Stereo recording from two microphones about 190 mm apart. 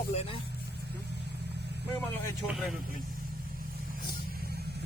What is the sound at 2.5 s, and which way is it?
Speech, centre (ahead or behind).